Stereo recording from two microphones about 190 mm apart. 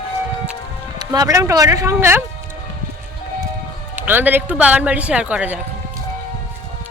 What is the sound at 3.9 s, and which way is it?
A man's voice, 10° right (ahead or behind).